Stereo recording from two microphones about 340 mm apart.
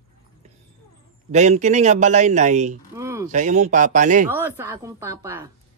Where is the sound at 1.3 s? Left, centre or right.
Centre.